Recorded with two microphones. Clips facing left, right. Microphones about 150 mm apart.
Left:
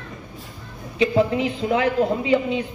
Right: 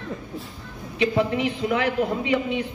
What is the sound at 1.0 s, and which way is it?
A man's voice, 30° left (ahead or behind).